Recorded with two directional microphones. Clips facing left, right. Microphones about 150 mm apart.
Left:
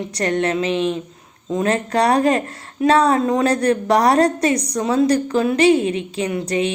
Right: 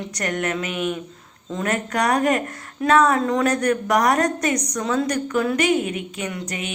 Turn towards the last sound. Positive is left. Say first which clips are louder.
# left 9 dB
turn(degrees=30)  # may be behind; listen again after turning